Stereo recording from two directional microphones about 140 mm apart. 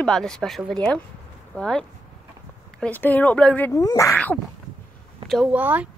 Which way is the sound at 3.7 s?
25° left (ahead or behind).